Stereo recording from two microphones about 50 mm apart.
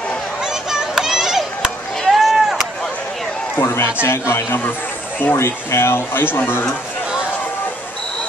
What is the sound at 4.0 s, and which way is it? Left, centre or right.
Speech, left.